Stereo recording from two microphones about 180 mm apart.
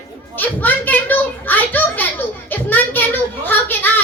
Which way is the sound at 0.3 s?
10° left (ahead or behind).